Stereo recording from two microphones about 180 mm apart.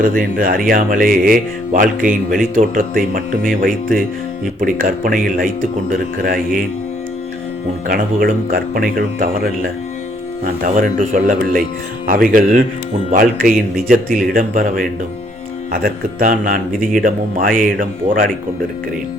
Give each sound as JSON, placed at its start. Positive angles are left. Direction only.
{"t": 0.0, "sound": "speech", "side_deg": -50}
{"t": 7.9, "sound": "speech", "side_deg": -50}
{"t": 10.4, "sound": "speech", "side_deg": -50}